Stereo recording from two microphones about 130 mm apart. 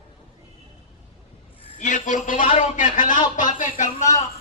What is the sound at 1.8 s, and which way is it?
A man's voice, 70° left (ahead or behind).